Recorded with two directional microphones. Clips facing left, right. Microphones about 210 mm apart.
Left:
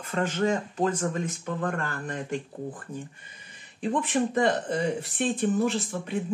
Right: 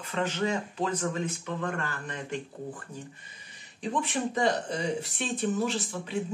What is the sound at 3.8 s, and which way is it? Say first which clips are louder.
Speech: left 4 dB; 55° left (ahead or behind).